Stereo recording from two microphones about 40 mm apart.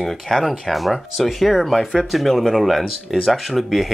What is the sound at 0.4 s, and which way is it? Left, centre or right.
Speech, centre.